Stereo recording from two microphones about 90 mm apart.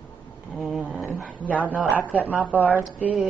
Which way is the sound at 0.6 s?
5° right (ahead or behind).